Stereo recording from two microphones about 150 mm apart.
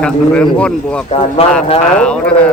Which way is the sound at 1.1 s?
40° left (ahead or behind).